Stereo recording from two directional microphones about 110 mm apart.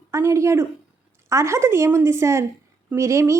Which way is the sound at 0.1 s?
25° right (ahead or behind).